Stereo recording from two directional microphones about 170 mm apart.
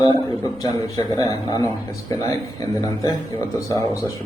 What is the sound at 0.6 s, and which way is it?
A man's voice, 20° left (ahead or behind).